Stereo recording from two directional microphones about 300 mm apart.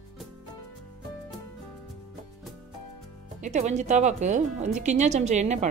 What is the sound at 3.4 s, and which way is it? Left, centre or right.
Speech, right.